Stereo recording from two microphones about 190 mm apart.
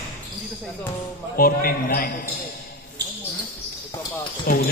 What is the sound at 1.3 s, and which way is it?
Speech, 50° left (ahead or behind).